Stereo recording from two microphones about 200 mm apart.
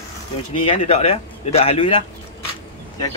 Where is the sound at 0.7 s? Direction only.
30° left (ahead or behind).